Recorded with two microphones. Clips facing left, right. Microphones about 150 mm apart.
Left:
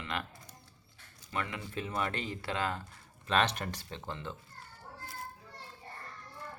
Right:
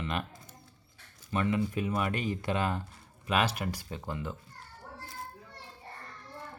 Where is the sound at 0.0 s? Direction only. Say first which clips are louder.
Right 4 dB; 15° right (ahead or behind).